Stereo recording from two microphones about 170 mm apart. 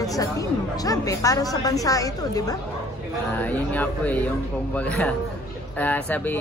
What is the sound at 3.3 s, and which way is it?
Speech, 10° left (ahead or behind).